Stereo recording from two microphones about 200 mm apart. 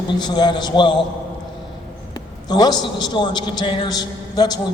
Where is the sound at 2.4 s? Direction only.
20° left (ahead or behind).